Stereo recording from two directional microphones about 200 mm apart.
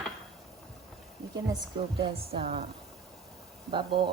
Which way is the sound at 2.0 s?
30° right (ahead or behind).